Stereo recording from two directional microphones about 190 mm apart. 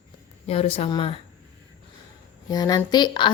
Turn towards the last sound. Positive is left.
turn(degrees=25)  # may be behind; listen again after turning